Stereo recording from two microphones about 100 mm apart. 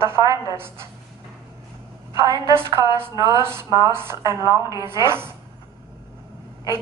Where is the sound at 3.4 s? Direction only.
25° right (ahead or behind).